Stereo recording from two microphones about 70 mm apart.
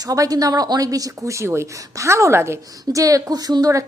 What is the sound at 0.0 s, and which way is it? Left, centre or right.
A woman's voice, right.